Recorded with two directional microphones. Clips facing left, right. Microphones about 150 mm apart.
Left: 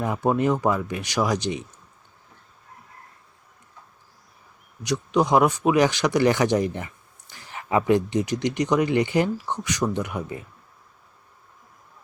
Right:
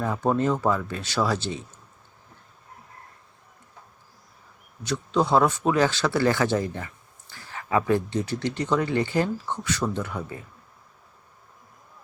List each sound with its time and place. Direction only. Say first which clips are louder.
0.0 s speech: left 1 dB; 15° left (ahead or behind)
4.8 s speech: left 2 dB; 15° left (ahead or behind)